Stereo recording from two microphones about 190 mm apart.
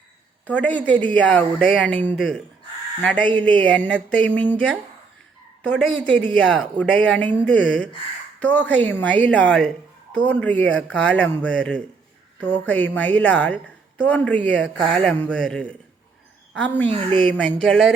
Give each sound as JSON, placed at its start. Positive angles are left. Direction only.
{"t": 0.4, "sound": "speech", "side_deg": 5}
{"t": 16.9, "sound": "a woman's voice", "side_deg": -30}
{"t": 17.2, "sound": "speech", "side_deg": 5}